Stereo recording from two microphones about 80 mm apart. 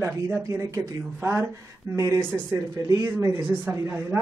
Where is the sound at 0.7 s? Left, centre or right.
Right.